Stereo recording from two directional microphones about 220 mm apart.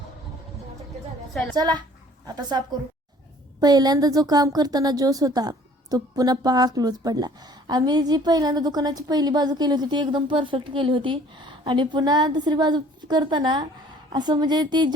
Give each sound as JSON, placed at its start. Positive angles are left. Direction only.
{"t": 1.3, "sound": "a woman's voice", "side_deg": 0}
{"t": 1.5, "sound": "a woman's voice", "side_deg": -20}